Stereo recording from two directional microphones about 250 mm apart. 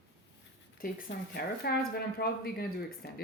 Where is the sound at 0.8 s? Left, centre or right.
Left.